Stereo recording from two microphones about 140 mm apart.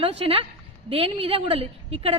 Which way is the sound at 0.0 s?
45° right (ahead or behind).